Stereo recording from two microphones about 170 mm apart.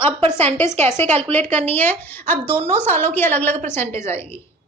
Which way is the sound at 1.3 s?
10° left (ahead or behind).